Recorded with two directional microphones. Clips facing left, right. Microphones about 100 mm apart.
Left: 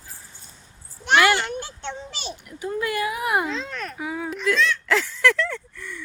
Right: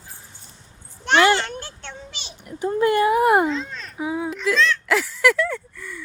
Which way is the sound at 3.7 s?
60° left (ahead or behind).